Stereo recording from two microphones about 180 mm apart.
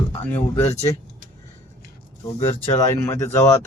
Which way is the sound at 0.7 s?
40° left (ahead or behind).